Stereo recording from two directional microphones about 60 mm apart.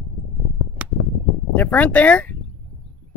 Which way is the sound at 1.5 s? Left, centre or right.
Left.